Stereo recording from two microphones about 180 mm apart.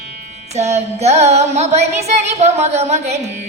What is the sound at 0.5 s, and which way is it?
Speech, 40° right (ahead or behind).